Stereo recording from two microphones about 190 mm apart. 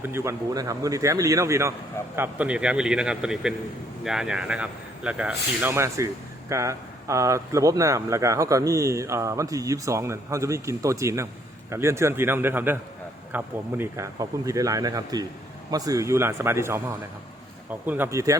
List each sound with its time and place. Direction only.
0.0 s speech: 15° right (ahead or behind)